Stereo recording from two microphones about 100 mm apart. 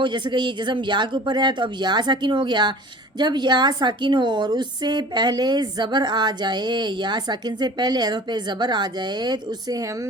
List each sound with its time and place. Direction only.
0.0 s a woman's voice: 50° right (ahead or behind); by 10.1 s 35° right (ahead or behind)